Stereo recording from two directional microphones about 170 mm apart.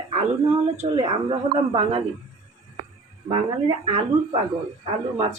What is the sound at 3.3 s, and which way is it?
Speech, 30° right (ahead or behind).